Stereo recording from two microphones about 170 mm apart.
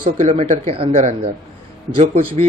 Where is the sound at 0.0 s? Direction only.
45° right (ahead or behind).